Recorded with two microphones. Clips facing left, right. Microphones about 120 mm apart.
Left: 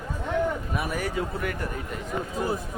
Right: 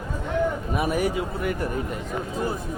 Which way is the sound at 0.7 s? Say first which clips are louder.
Right 5 dB; 20° right (ahead or behind).